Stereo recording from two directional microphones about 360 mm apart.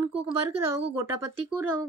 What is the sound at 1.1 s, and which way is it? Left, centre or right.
Speech, right.